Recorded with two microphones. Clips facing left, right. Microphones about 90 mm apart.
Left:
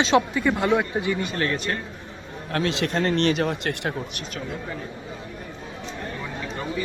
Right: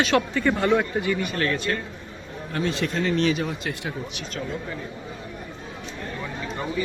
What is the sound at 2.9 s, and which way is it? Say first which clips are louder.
Speech: left 2 dB; 60° left (ahead or behind).